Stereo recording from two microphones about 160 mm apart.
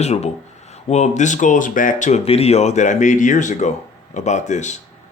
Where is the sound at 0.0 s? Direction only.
45° left (ahead or behind).